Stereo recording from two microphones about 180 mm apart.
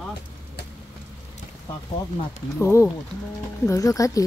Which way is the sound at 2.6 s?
15° left (ahead or behind).